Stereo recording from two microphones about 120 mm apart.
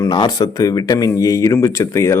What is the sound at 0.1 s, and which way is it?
Speech, 35° left (ahead or behind).